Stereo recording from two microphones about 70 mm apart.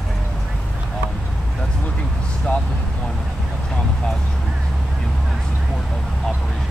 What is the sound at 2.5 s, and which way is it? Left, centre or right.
Vehicle, left.